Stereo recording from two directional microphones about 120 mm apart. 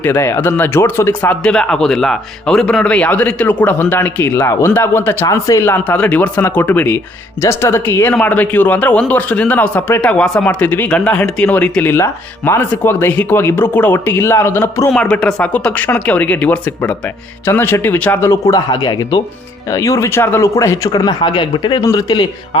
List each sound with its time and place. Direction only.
0.0 s a man's voice: 20° left (ahead or behind)
14.8 s a man's voice: 5° left (ahead or behind); by 18.6 s 25° left (ahead or behind)
18.7 s speech: 35° left (ahead or behind)
19.7 s speech: 25° left (ahead or behind)